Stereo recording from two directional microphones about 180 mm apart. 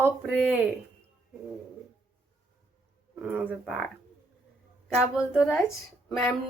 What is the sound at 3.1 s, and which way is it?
Speech, 10° right (ahead or behind).